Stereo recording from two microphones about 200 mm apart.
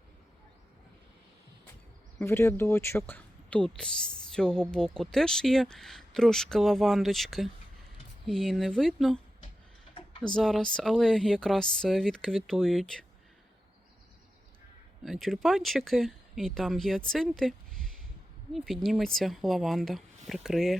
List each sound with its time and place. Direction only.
2.1 s speech: 10° left (ahead or behind)
9.9 s tick-tock: 25° left (ahead or behind)
10.3 s speech: 5° left (ahead or behind)
15.0 s speech: centre (ahead or behind)